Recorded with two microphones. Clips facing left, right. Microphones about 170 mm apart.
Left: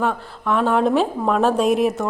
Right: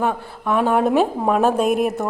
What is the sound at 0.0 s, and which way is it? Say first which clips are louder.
A woman's voice: even; 10° right (ahead or behind).